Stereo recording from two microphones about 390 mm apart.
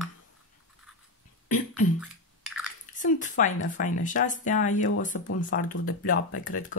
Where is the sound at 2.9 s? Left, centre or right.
Centre.